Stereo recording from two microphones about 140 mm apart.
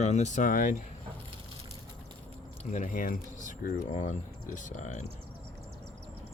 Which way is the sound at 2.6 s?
65° left (ahead or behind).